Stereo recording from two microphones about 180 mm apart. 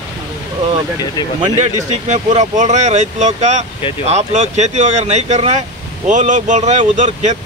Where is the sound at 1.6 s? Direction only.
40° right (ahead or behind).